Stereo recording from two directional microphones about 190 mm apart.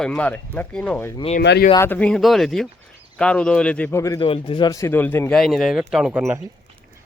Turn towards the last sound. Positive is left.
turn(degrees=-5)  # may be behind; listen again after turning